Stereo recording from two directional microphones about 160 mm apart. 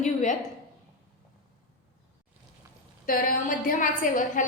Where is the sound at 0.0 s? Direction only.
50° left (ahead or behind).